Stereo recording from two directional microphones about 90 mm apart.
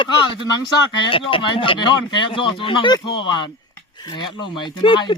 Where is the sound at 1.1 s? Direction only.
75° left (ahead or behind).